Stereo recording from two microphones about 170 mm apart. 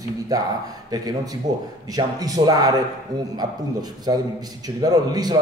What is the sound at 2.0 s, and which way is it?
Speech, 20° right (ahead or behind).